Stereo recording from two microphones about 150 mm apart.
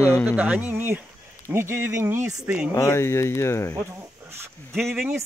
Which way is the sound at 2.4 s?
10° right (ahead or behind).